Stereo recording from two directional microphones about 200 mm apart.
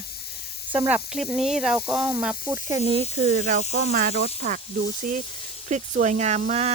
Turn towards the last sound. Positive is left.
turn(degrees=-35)  # may be behind; listen again after turning